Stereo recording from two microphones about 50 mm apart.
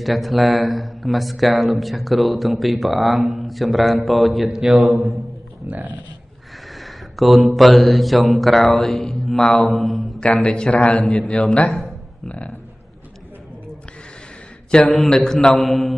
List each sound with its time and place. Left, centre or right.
0.0 s speech: centre
4.5 s speech: centre
5.7 s speech: right
6.7 s mantra: centre
10.2 s a man's voice: left
14.7 s a man's voice: centre
15.1 s speech: centre